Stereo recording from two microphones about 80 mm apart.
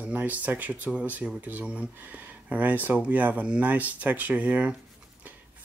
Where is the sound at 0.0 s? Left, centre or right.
Centre.